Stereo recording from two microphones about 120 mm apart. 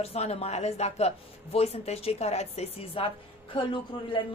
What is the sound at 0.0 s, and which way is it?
A man's voice, 60° left (ahead or behind).